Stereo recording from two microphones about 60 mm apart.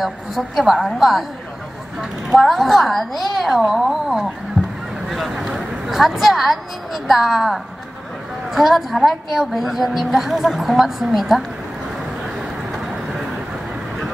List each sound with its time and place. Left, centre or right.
0.0 s a woman's voice: centre
4.6 s a sound: centre
5.1 s a woman's voice: centre
12.4 s vehicle: centre